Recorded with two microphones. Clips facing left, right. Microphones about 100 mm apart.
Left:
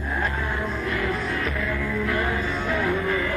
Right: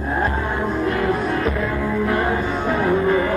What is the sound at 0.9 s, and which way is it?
Music, 35° right (ahead or behind).